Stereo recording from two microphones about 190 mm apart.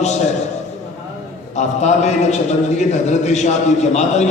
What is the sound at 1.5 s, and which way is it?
A man's voice, 35° left (ahead or behind).